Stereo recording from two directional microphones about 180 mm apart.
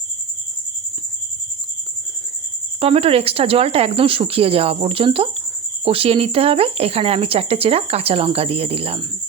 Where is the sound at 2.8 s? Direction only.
30° right (ahead or behind).